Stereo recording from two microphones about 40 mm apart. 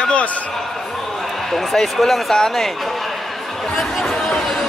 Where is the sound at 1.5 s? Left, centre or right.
Centre.